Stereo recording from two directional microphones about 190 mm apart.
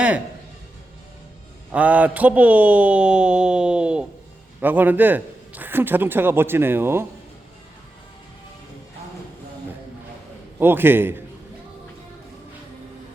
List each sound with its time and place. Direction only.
1.7 s a man's voice: 10° right (ahead or behind)
10.6 s a man's voice: 10° right (ahead or behind)